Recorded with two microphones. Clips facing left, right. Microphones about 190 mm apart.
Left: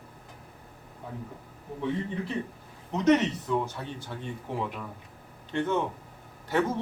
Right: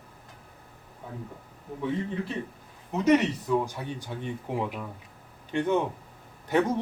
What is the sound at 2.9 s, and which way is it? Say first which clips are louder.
Speech: right 1 dB; 10° right (ahead or behind).